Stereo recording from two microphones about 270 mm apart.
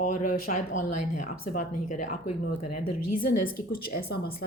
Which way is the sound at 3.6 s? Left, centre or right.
Left.